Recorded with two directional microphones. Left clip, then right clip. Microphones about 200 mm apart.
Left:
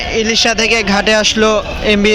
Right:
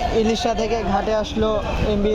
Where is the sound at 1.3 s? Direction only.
15° left (ahead or behind).